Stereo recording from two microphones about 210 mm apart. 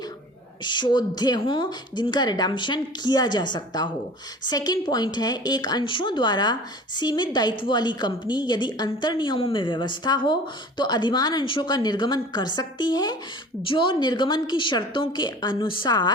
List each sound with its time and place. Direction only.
0.6 s a woman's voice: 20° left (ahead or behind)